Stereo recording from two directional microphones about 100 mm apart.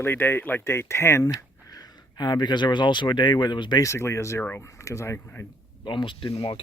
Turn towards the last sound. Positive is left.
turn(degrees=60)  # may be behind; listen again after turning